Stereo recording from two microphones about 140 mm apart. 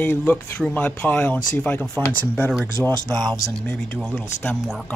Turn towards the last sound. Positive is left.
turn(degrees=5)  # may be behind; listen again after turning